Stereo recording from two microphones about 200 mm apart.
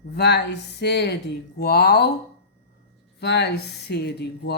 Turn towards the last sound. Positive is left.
turn(degrees=55)  # may be behind; listen again after turning